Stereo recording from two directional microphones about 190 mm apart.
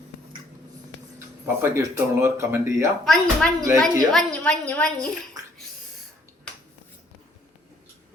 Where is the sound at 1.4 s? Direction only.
15° right (ahead or behind).